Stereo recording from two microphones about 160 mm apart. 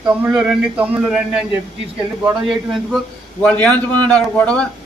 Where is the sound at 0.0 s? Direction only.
5° right (ahead or behind).